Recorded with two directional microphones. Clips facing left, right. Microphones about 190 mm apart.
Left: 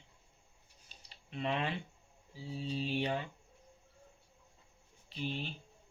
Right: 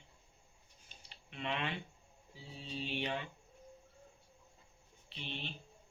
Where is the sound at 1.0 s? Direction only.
35° left (ahead or behind).